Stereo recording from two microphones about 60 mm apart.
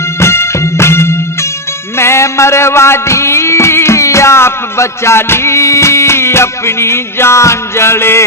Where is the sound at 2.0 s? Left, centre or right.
Left.